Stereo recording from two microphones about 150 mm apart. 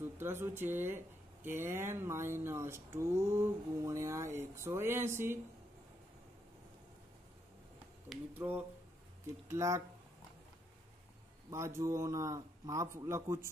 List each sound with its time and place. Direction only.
0.0 s speech: 15° right (ahead or behind)
8.4 s a man's voice: 10° right (ahead or behind)
11.5 s a man's voice: 20° right (ahead or behind)